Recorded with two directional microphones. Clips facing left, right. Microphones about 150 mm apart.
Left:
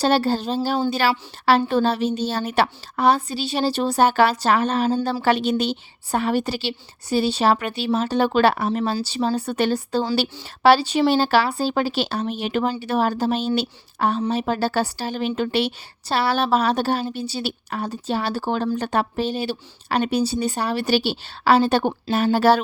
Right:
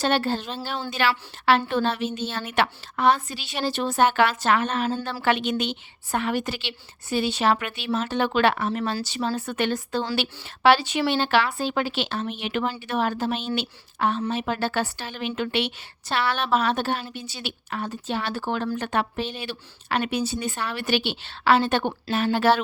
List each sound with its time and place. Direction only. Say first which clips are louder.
0.0 s a woman's voice: left 4 dB; 35° left (ahead or behind)